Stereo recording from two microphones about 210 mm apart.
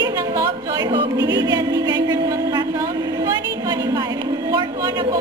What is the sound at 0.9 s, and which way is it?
Music, 15° right (ahead or behind).